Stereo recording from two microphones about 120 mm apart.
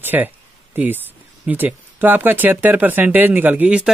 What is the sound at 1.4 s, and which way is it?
Speech, 15° right (ahead or behind).